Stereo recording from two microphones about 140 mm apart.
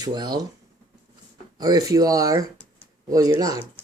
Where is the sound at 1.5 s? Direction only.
25° right (ahead or behind).